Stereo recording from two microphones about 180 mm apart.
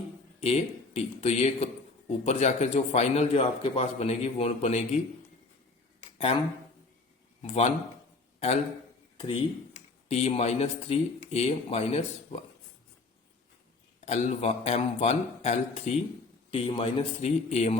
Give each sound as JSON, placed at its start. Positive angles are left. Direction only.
{"t": 0.3, "sound": "speech", "side_deg": 35}
{"t": 7.4, "sound": "speech", "side_deg": 35}
{"t": 9.1, "sound": "speech", "side_deg": 30}
{"t": 14.0, "sound": "speech", "side_deg": 40}